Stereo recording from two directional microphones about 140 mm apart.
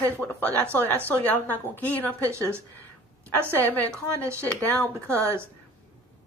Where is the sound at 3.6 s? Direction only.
15° left (ahead or behind).